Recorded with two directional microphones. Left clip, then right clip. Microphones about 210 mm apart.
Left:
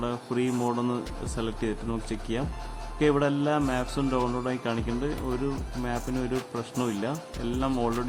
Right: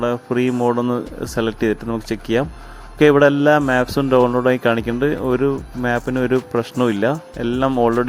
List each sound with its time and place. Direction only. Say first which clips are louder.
0.0 s speech: right 10 dB; 30° right (ahead or behind)